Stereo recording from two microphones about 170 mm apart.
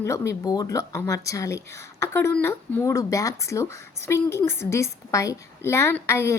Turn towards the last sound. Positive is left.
turn(degrees=15)  # may be behind; listen again after turning